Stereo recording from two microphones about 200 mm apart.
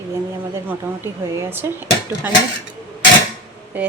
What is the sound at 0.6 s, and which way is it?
A woman's voice, 10° right (ahead or behind).